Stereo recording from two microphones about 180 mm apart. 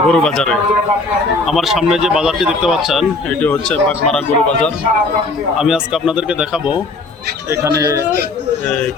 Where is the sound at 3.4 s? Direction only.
10° left (ahead or behind).